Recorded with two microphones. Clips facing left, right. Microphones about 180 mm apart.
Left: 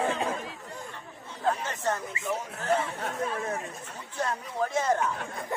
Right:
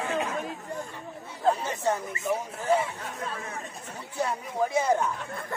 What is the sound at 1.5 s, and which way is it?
Speech, 10° right (ahead or behind).